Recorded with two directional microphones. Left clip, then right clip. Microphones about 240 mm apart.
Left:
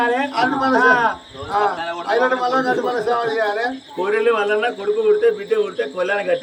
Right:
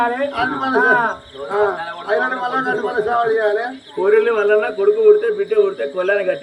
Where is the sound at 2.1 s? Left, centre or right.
Right.